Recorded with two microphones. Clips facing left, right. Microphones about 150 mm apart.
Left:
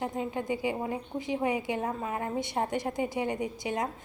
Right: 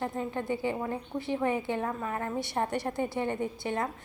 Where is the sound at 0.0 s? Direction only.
15° left (ahead or behind).